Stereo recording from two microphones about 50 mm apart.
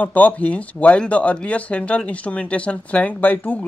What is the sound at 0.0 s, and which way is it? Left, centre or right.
Speech, left.